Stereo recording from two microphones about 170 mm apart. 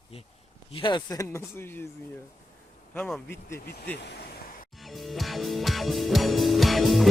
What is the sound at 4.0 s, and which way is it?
Speech, 90° left.